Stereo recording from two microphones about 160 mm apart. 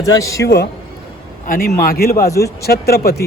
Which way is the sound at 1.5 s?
65° left (ahead or behind).